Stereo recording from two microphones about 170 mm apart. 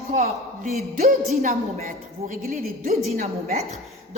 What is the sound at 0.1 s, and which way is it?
A man's voice, 50° right (ahead or behind).